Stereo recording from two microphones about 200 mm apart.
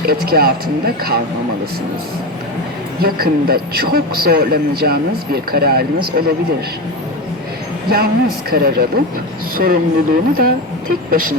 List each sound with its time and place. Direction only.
0.0 s a man's voice: 50° right (ahead or behind)
3.0 s a man's voice: 50° right (ahead or behind)
7.9 s a man's voice: 50° right (ahead or behind)